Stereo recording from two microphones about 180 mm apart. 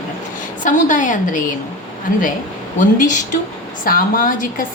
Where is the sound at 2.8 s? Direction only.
45° left (ahead or behind).